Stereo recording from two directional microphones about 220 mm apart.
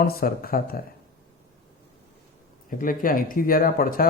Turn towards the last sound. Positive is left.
turn(degrees=40)  # may be behind; listen again after turning